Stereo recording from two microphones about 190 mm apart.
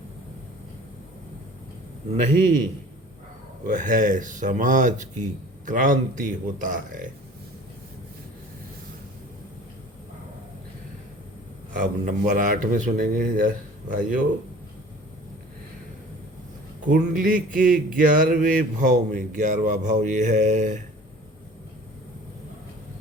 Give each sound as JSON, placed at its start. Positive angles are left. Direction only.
{"t": 3.7, "sound": "speech", "side_deg": -45}
{"t": 11.7, "sound": "speech", "side_deg": -40}
{"t": 16.9, "sound": "speech", "side_deg": -45}